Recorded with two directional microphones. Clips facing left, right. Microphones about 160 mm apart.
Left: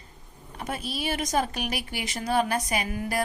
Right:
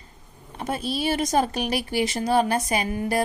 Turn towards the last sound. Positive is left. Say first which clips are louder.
# right 4 dB
turn(degrees=-30)  # may be behind; listen again after turning